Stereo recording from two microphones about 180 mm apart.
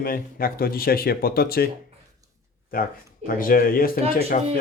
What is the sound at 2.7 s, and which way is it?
A man's voice, 50° left (ahead or behind).